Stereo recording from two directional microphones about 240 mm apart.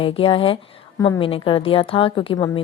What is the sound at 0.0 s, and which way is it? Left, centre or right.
A woman's voice, left.